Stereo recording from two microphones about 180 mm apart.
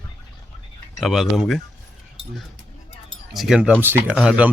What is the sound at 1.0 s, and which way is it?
Speech, centre (ahead or behind).